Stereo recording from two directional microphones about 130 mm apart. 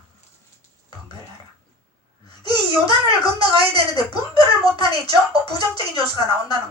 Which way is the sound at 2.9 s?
35° left (ahead or behind).